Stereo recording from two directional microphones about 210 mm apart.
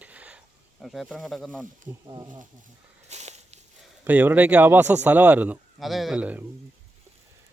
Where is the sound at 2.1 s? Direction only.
20° right (ahead or behind).